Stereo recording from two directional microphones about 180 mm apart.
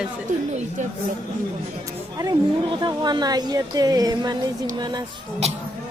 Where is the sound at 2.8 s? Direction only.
25° right (ahead or behind).